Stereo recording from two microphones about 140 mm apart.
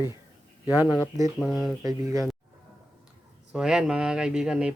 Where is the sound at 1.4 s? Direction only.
Centre (ahead or behind).